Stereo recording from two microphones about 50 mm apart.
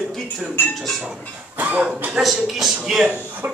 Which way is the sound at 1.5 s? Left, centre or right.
Right.